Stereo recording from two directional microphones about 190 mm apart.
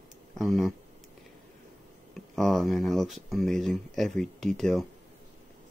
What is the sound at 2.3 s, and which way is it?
Speech, centre (ahead or behind).